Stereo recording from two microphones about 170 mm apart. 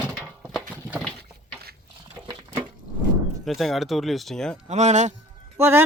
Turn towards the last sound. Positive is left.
turn(degrees=-15)  # may be behind; listen again after turning